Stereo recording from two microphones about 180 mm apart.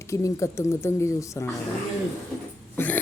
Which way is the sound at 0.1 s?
15° left (ahead or behind).